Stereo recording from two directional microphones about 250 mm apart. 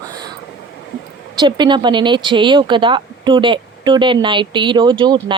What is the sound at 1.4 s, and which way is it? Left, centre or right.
Speech, centre.